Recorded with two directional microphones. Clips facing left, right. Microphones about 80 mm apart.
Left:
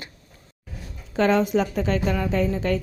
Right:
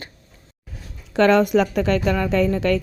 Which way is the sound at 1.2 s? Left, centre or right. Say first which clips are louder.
Right 4 dB; right.